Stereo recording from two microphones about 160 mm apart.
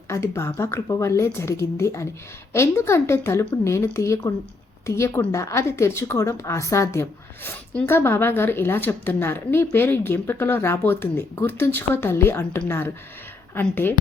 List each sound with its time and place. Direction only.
0.1 s speech: 15° left (ahead or behind)